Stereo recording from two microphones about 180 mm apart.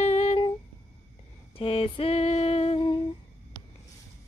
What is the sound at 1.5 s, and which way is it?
Female singing, 30° left (ahead or behind).